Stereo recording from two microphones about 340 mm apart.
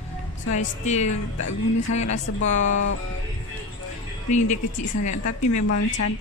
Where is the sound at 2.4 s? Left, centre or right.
Left.